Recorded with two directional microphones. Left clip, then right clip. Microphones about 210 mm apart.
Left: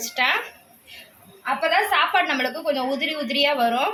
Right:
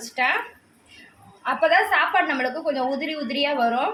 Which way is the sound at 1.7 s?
10° right (ahead or behind).